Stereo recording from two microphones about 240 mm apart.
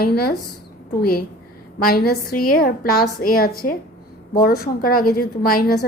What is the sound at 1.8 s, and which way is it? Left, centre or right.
A woman's voice, left.